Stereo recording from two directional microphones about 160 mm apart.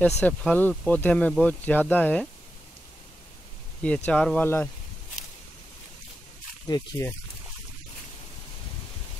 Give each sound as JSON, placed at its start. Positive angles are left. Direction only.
{"t": 0.0, "sound": "speech", "side_deg": 5}
{"t": 3.8, "sound": "speech", "side_deg": 5}
{"t": 6.7, "sound": "speech", "side_deg": 25}